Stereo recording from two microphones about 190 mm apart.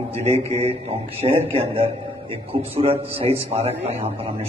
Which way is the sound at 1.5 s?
30° right (ahead or behind).